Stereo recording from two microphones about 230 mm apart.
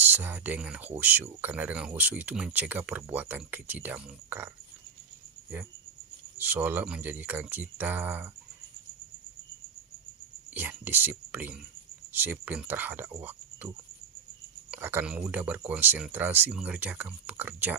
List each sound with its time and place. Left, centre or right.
0.0 s speech: centre
6.3 s speech: centre
10.5 s speech: centre
13.2 s cricket: centre
14.7 s speech: centre